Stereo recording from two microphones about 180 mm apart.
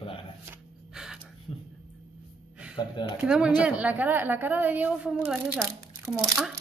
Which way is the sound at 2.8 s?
25° left (ahead or behind).